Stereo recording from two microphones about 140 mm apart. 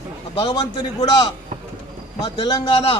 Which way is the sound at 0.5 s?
30° left (ahead or behind).